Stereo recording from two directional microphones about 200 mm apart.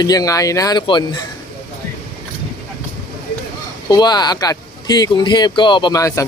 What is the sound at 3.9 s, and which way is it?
Speech, 20° left (ahead or behind).